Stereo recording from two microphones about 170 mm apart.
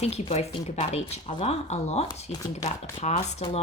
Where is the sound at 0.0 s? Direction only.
40° left (ahead or behind).